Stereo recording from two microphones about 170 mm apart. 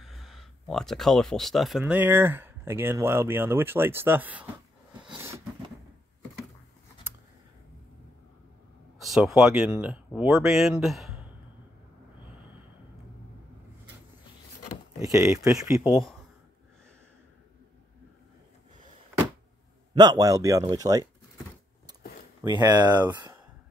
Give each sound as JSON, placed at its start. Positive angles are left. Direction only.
{"t": 0.0, "sound": "speech", "side_deg": 0}
{"t": 5.0, "sound": "a sound", "side_deg": -10}
{"t": 9.0, "sound": "speech", "side_deg": 0}
{"t": 15.0, "sound": "speech", "side_deg": -20}
{"t": 15.8, "sound": "speech", "side_deg": 0}
{"t": 19.9, "sound": "speech", "side_deg": -25}
{"t": 22.4, "sound": "speech", "side_deg": -25}